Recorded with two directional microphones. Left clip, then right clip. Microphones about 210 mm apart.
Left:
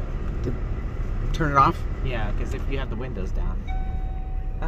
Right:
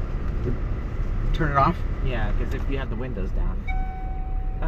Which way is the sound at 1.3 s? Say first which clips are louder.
Left 2 dB; 20° left (ahead or behind).